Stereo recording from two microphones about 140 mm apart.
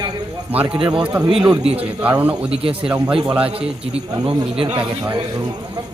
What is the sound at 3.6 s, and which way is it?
A man's voice, 45° right (ahead or behind).